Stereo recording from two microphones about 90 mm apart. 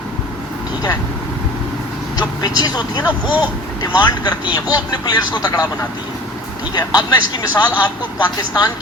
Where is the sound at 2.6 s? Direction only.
45° left (ahead or behind).